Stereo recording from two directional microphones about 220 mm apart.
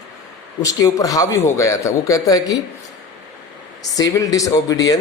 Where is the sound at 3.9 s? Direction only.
15° left (ahead or behind).